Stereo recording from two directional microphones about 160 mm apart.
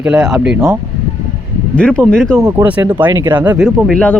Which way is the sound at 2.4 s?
20° right (ahead or behind).